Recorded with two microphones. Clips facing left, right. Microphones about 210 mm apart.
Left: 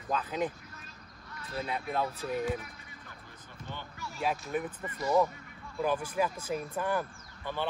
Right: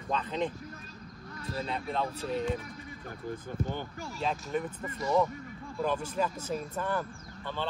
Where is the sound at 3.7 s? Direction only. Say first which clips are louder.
Right 6 dB; 45° right (ahead or behind).